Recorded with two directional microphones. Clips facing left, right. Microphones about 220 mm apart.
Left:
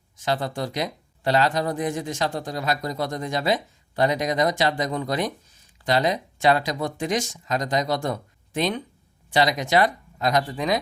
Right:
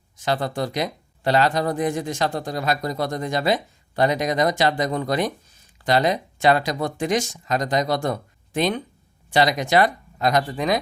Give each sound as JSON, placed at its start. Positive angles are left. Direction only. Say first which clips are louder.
{"t": 0.3, "sound": "speech", "louder": "right 2 dB", "side_deg": -60}